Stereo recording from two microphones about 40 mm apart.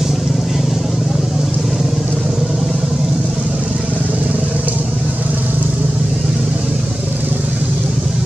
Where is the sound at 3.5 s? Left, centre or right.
Right.